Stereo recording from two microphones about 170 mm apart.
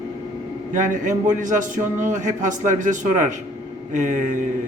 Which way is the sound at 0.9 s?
50° right (ahead or behind).